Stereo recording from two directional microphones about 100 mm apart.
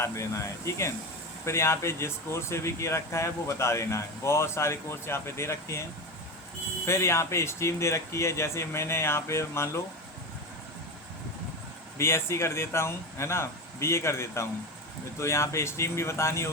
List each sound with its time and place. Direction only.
0.0 s speech: 30° left (ahead or behind)
6.8 s speech: 25° left (ahead or behind)
11.9 s speech: 25° left (ahead or behind)